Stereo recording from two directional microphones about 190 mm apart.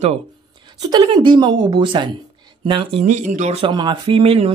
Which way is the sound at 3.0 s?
40° right (ahead or behind).